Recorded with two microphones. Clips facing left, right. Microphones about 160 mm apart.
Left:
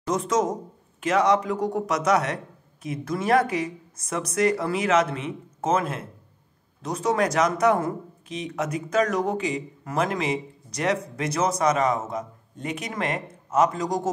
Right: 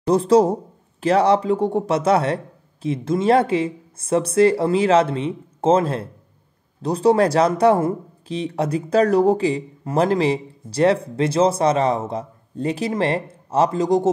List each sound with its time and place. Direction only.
0.0 s speech: 30° right (ahead or behind)